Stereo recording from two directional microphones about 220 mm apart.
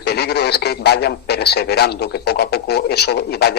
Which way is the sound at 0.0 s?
45° left (ahead or behind).